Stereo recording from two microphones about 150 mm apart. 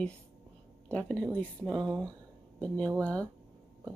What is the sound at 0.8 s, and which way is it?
Speech, 10° left (ahead or behind).